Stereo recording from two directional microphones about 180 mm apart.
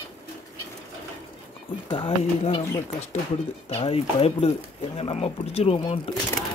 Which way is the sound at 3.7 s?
35° left (ahead or behind).